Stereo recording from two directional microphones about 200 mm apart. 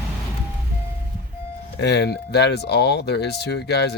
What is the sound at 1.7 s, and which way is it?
Speech, 55° left (ahead or behind).